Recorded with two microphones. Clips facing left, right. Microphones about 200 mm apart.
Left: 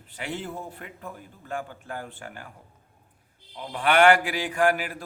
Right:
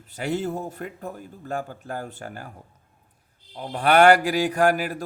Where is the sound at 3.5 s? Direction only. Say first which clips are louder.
Right 3 dB; 40° right (ahead or behind).